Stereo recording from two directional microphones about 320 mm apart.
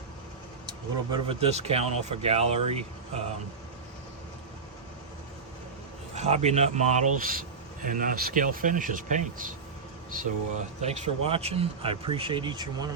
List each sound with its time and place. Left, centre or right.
0.7 s speech: centre
6.1 s speech: centre
10.8 s speech: right